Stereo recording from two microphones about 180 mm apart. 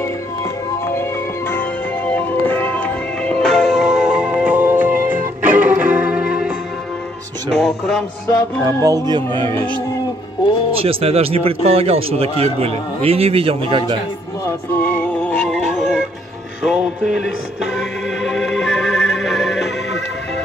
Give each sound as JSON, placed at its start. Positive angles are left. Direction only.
{"t": 2.1, "sound": "music", "side_deg": 10}
{"t": 8.6, "sound": "speech", "side_deg": -20}
{"t": 10.8, "sound": "speech", "side_deg": -30}
{"t": 14.7, "sound": "music", "side_deg": 10}